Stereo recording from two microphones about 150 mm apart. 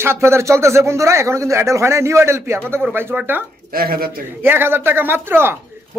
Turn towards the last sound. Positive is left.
turn(degrees=-15)  # may be behind; listen again after turning